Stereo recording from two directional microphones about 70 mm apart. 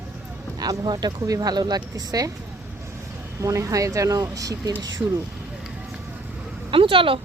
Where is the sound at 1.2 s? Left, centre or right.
Right.